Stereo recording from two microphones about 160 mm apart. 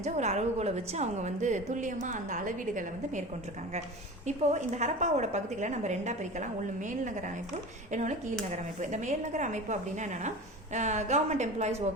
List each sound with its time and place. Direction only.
0.0 s a woman's voice: 45° right (ahead or behind)
4.3 s a woman's voice: 45° right (ahead or behind)